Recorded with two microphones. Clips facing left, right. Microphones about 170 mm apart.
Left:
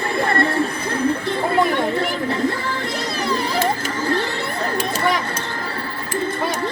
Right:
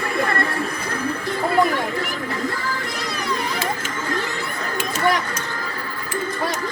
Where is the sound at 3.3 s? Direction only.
30° left (ahead or behind).